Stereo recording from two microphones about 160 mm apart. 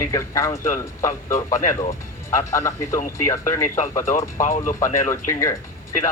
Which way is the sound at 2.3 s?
20° left (ahead or behind).